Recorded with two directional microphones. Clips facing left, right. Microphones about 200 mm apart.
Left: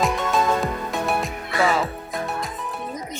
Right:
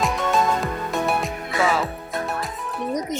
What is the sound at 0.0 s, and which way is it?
Music, centre (ahead or behind).